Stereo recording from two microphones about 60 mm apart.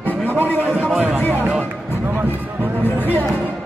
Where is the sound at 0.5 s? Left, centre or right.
Right.